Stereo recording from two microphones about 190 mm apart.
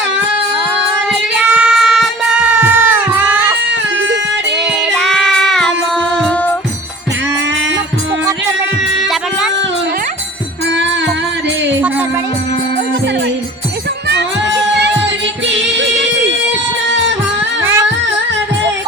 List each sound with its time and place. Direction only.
1.4 s child singing: 5° right (ahead or behind)
4.5 s child singing: centre (ahead or behind)
14.1 s music: 65° right (ahead or behind)
17.6 s music: 15° right (ahead or behind)